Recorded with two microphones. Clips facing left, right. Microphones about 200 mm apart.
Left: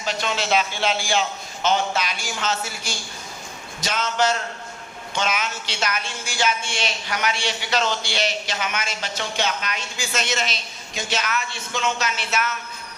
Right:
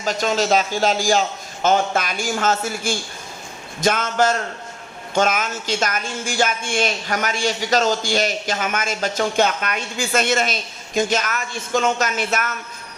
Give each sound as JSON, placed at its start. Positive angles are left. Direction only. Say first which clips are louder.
{"t": 0.0, "sound": "a man's voice", "louder": "right 6 dB", "side_deg": -45}